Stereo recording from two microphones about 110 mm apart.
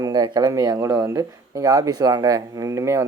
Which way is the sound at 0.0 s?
40° right (ahead or behind).